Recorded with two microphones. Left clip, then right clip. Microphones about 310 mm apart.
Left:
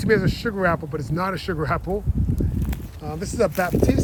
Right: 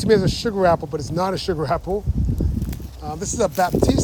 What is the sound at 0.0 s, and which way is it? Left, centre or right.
Speech, centre.